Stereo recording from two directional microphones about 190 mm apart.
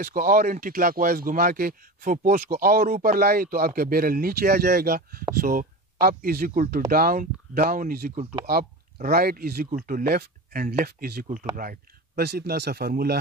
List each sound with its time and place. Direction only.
0.0 s speech: 50° right (ahead or behind)
8.1 s speech: 35° right (ahead or behind)
8.5 s speech: 50° right (ahead or behind)